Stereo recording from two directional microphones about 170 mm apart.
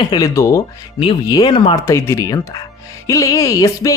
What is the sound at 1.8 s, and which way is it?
Speech, 15° left (ahead or behind).